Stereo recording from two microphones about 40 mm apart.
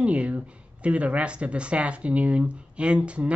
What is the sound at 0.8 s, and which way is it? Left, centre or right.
Speech, right.